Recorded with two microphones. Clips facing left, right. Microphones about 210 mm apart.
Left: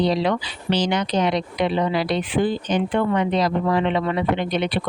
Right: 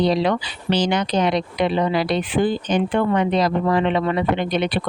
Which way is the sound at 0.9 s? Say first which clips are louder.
Right 1 dB; 50° right (ahead or behind).